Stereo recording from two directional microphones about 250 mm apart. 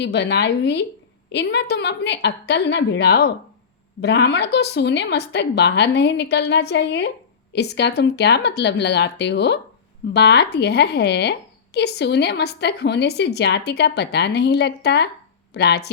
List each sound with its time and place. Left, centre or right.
0.0 s a woman's voice: left